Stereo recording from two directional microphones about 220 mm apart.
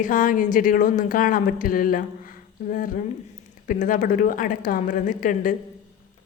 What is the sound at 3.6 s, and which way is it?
A woman's voice, 35° left (ahead or behind).